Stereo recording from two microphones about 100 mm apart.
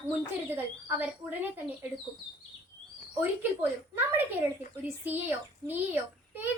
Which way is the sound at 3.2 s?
25° right (ahead or behind).